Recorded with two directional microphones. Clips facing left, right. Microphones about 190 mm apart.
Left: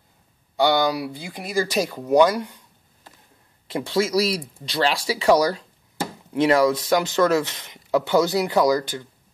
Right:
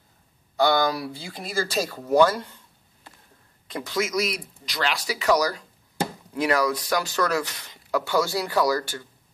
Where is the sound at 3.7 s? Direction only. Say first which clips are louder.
Left 5 dB; 30° left (ahead or behind).